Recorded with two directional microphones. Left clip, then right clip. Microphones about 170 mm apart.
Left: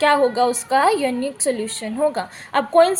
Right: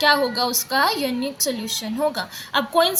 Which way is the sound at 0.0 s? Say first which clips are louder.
Left 3 dB; 45° left (ahead or behind).